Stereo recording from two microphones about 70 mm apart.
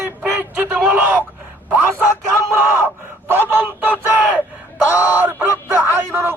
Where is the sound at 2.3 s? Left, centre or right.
Right.